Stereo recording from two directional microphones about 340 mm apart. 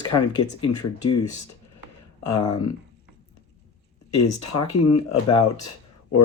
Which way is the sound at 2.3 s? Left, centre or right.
Left.